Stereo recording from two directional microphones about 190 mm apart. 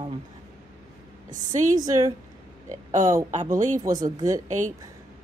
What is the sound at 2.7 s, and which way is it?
Speech, 40° right (ahead or behind).